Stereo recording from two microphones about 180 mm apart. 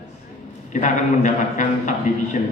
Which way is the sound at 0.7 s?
45° left (ahead or behind).